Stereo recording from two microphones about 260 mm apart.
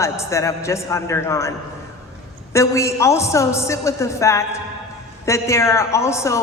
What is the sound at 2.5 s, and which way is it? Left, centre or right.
A woman's voice, centre.